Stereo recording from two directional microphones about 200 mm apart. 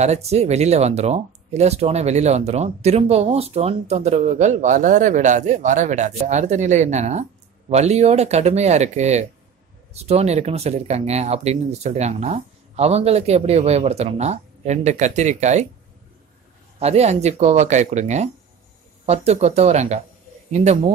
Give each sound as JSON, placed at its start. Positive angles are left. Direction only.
{"t": 0.0, "sound": "speech", "side_deg": -35}
{"t": 16.8, "sound": "speech", "side_deg": -30}